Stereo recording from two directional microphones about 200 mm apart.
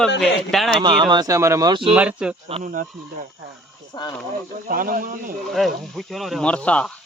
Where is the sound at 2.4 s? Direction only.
40° right (ahead or behind).